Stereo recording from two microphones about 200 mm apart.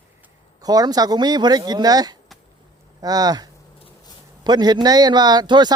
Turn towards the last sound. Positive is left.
turn(degrees=-20)  # may be behind; listen again after turning